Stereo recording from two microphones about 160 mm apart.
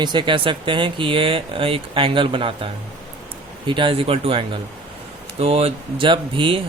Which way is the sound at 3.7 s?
30° right (ahead or behind).